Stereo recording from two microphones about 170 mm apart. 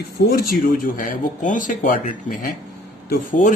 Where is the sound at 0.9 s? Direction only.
50° left (ahead or behind).